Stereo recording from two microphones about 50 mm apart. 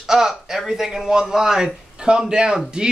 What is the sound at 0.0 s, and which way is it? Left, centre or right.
A man's voice, centre.